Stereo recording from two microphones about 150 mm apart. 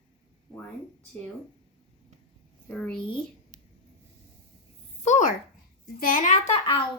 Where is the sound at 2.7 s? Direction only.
5° left (ahead or behind).